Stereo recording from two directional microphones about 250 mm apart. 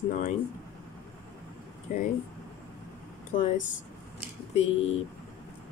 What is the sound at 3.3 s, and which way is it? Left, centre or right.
Speech, left.